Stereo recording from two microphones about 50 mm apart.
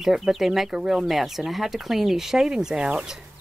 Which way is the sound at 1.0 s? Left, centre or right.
Centre.